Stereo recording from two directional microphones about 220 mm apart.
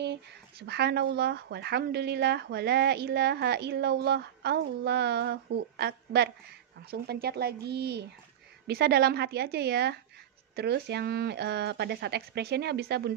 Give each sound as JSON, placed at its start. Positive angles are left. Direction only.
{"t": 0.0, "sound": "speech", "side_deg": -50}